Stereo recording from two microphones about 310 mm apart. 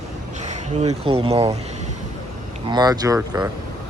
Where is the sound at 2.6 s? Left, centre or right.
Centre.